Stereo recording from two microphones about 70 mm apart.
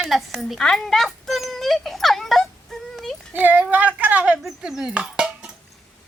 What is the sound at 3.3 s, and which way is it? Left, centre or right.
Speech, right.